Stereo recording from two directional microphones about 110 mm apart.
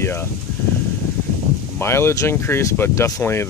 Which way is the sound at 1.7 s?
25° left (ahead or behind).